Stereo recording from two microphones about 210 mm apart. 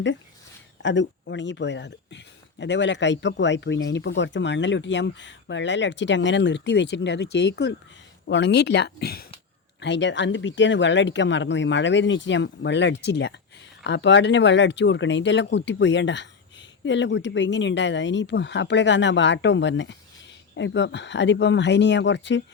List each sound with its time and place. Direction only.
0.8 s speech: 60° left (ahead or behind)